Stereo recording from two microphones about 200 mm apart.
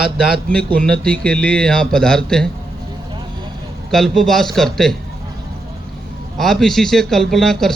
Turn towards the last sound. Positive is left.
turn(degrees=0)  # may be behind; listen again after turning